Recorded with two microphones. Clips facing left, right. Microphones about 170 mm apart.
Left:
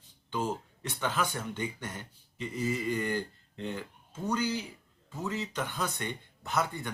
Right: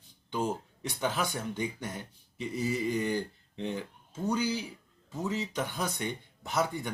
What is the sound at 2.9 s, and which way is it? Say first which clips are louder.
Speech: right 1 dB; 15° right (ahead or behind).